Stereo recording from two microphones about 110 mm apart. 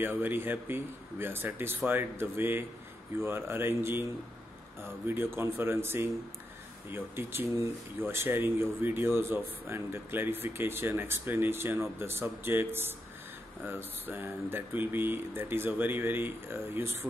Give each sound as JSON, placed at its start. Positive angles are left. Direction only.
{"t": 0.0, "sound": "speech", "side_deg": -20}